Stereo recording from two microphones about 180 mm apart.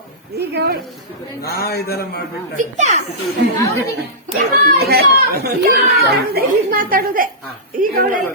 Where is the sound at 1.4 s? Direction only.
60° left (ahead or behind).